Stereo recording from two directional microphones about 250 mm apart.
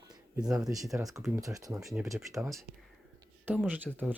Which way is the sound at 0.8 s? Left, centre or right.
Centre.